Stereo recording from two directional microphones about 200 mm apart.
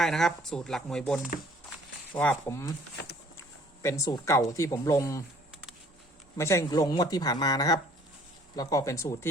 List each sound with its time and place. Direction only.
0.0 s speech: centre (ahead or behind)
3.8 s speech: 15° left (ahead or behind)
6.3 s speech: 15° left (ahead or behind)